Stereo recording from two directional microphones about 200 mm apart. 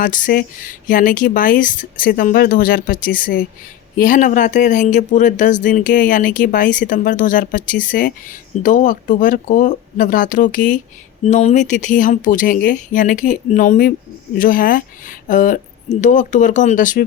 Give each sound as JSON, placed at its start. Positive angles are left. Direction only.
{"t": 0.0, "sound": "speech", "side_deg": 40}